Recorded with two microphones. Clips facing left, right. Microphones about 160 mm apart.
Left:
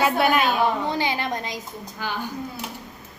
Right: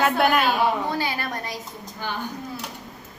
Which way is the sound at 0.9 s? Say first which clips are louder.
Left 2 dB; 20° left (ahead or behind).